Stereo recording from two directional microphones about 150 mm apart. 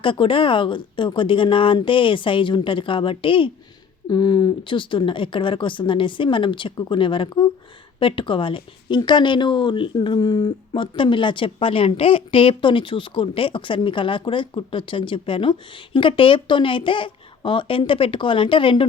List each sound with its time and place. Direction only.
0.0 s a woman's voice: 35° left (ahead or behind)